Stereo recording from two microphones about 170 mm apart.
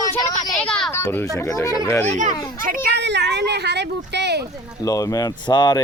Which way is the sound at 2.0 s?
45° right (ahead or behind).